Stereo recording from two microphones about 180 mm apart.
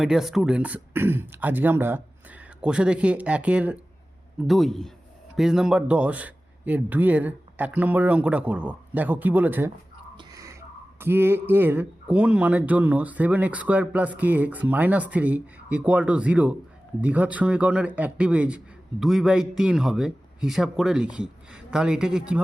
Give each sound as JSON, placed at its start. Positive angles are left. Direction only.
{"t": 0.0, "sound": "a man's voice", "side_deg": 0}
{"t": 10.2, "sound": "a sound", "side_deg": -20}
{"t": 11.0, "sound": "a man's voice", "side_deg": -15}